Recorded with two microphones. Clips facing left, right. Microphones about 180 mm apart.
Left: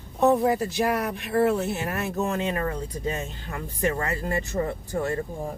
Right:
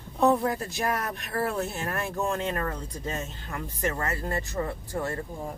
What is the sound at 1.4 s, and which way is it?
Speech, 5° left (ahead or behind).